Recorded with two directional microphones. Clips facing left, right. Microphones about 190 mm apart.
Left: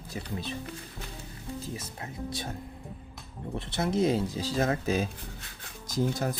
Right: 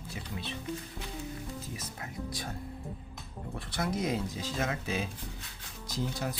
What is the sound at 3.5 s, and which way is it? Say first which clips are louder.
Speech: left 5 dB; 25° left (ahead or behind).